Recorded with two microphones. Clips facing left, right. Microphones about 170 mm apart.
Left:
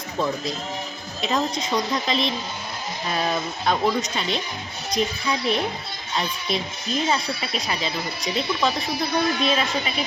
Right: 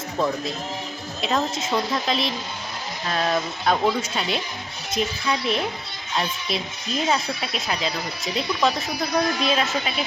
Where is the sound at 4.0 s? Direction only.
5° right (ahead or behind).